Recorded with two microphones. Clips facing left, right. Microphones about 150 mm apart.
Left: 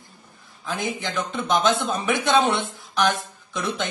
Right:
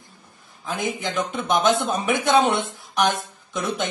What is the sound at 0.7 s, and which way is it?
A man's voice, 20° right (ahead or behind).